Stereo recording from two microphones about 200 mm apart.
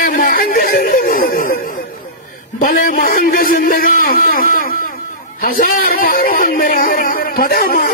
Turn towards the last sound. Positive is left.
turn(degrees=45)  # may be behind; listen again after turning